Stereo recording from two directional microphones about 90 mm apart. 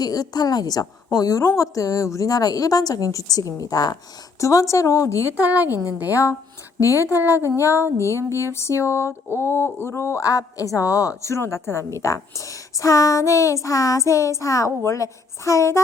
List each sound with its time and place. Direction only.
0.0 s a woman's voice: 45° left (ahead or behind)
5.4 s a woman's voice: 20° right (ahead or behind)
6.1 s a woman's voice: 35° left (ahead or behind)